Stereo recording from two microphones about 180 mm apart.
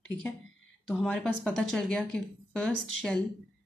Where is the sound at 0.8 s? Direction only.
5° left (ahead or behind).